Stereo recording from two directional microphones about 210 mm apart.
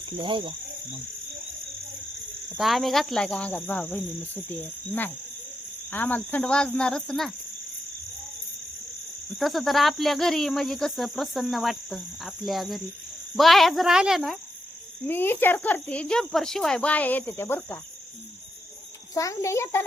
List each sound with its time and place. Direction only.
0.2 s speech: 25° right (ahead or behind)
2.6 s speech: centre (ahead or behind)
9.4 s speech: centre (ahead or behind)
15.0 s speech: 10° left (ahead or behind)
19.1 s speech: 15° left (ahead or behind)